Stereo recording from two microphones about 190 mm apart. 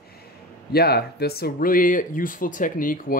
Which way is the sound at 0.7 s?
55° left (ahead or behind).